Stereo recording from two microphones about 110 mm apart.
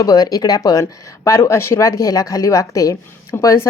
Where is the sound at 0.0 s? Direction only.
35° left (ahead or behind).